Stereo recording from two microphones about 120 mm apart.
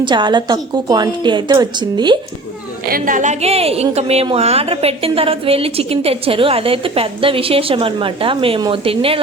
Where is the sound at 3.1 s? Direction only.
85° right.